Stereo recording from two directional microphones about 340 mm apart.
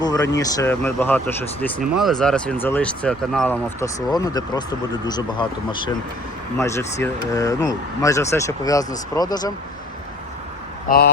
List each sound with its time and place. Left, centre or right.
0.0 s speech: centre
10.8 s speech: left